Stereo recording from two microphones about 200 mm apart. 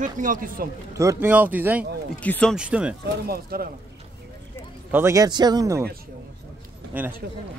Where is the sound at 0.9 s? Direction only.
15° right (ahead or behind).